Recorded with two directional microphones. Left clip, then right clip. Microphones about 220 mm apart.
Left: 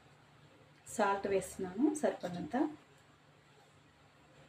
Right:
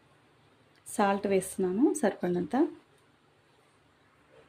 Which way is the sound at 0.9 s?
50° right (ahead or behind).